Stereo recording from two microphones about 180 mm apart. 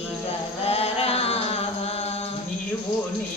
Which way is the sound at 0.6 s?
35° left (ahead or behind).